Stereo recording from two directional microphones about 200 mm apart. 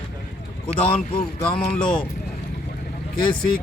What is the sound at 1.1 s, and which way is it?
Speech, 25° left (ahead or behind).